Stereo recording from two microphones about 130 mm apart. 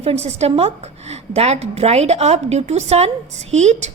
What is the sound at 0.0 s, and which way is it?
A woman's voice, 55° right (ahead or behind).